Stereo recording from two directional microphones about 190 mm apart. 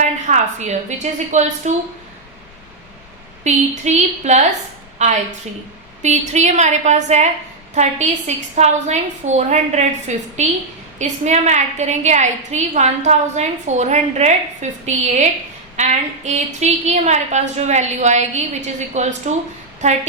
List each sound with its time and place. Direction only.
0.0 s a woman's voice: 40° right (ahead or behind)
3.4 s a woman's voice: 35° right (ahead or behind)